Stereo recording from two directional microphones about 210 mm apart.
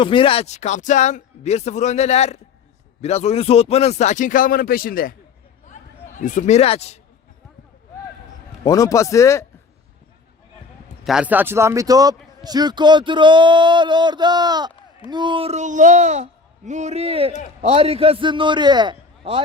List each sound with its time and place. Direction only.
0.0 s speech: 25° left (ahead or behind); by 5.1 s 45° left (ahead or behind)
5.6 s a sound: 35° left (ahead or behind)
8.6 s speech: 15° left (ahead or behind)
11.0 s a man's voice: 5° right (ahead or behind); by 19.4 s 25° right (ahead or behind)